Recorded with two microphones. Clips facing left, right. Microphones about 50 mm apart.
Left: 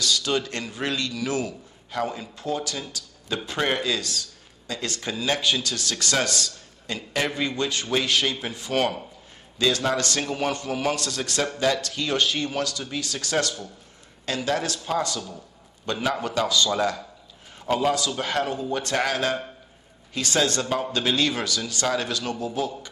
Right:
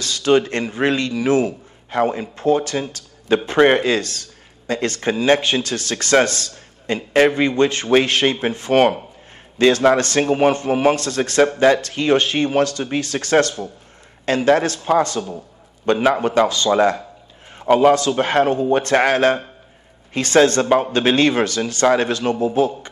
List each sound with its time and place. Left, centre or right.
0.0 s speech: right